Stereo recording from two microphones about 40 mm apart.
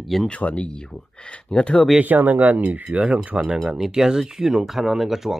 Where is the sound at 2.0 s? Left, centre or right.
Right; by 5.4 s centre.